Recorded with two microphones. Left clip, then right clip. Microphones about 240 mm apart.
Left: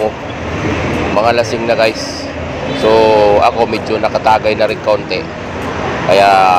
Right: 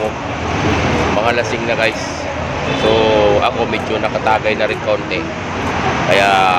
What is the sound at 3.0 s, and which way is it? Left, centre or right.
Speech, centre.